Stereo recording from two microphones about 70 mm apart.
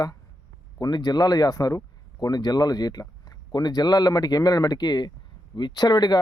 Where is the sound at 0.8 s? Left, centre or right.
Left.